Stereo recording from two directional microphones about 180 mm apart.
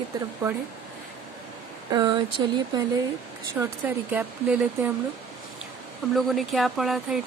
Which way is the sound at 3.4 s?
15° right (ahead or behind).